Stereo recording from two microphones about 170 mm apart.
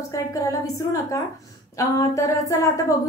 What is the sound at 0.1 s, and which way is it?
Speech, 20° left (ahead or behind).